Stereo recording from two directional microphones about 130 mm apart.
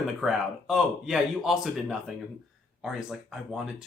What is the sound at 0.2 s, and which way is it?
Speech, 5° right (ahead or behind).